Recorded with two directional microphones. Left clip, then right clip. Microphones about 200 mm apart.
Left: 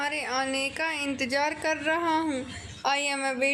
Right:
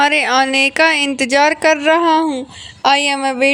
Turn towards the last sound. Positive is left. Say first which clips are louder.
# right 12 dB
turn(degrees=-35)  # may be behind; listen again after turning